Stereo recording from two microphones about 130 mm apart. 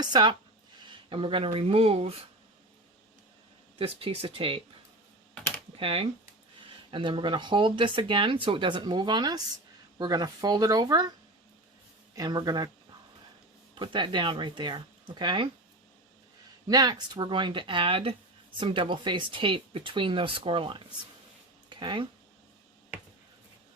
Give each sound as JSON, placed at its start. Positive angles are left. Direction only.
{"t": 0.0, "sound": "speech", "side_deg": -35}
{"t": 3.8, "sound": "speech", "side_deg": -45}
{"t": 5.7, "sound": "speech", "side_deg": -45}
{"t": 12.1, "sound": "speech", "side_deg": -30}
{"t": 13.7, "sound": "speech", "side_deg": -40}
{"t": 16.6, "sound": "speech", "side_deg": -30}